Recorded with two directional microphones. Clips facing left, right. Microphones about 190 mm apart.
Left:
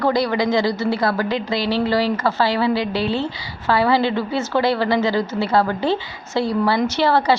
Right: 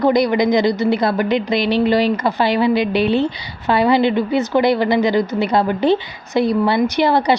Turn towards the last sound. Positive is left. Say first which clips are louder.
# right 2 dB
turn(degrees=-15)  # may be behind; listen again after turning